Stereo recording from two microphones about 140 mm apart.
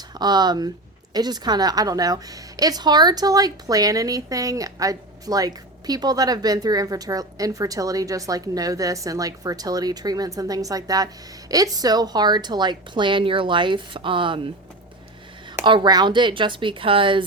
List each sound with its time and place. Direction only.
0.2 s a woman's voice: 30° right (ahead or behind)
15.6 s speech: 35° right (ahead or behind)